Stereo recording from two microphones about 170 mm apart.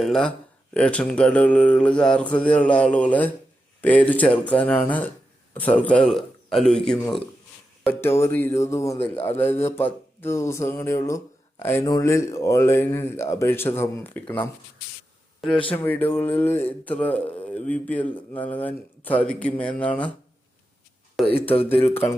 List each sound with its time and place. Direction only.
0.0 s a man's voice: 5° left (ahead or behind)
7.9 s speech: 15° left (ahead or behind)
15.7 s speech: 10° left (ahead or behind)
21.2 s a man's voice: centre (ahead or behind)
21.5 s speech: 35° left (ahead or behind)
21.8 s speech: 15° left (ahead or behind)